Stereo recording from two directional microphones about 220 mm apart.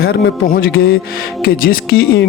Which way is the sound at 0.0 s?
40° left (ahead or behind).